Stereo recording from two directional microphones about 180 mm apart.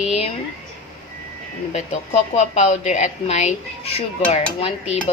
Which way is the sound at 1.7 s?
40° left (ahead or behind).